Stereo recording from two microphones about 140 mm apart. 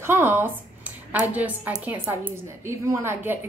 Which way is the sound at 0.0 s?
15° right (ahead or behind).